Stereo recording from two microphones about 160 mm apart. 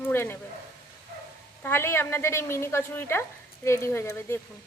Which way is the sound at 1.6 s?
15° left (ahead or behind).